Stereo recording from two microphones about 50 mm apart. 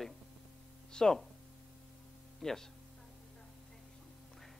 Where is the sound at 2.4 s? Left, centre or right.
Centre.